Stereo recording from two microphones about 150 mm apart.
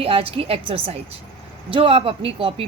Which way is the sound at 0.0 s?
40° right (ahead or behind).